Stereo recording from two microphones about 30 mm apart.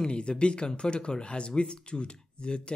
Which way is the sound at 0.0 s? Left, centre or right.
Left.